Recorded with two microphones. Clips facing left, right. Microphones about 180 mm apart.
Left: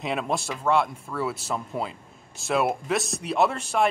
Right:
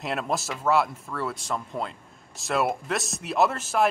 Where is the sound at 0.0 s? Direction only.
Centre (ahead or behind).